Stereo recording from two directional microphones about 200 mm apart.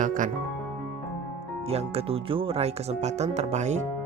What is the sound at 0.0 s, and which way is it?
Speech, 40° right (ahead or behind).